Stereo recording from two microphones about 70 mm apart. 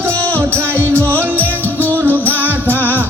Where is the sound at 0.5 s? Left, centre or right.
Right.